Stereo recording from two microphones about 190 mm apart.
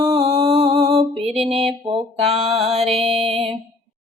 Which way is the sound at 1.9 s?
30° right (ahead or behind).